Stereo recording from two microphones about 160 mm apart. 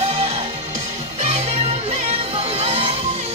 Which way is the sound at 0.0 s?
40° right (ahead or behind).